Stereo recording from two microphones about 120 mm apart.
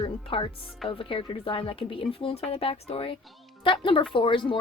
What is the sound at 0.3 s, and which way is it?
A woman's voice, 45° left (ahead or behind).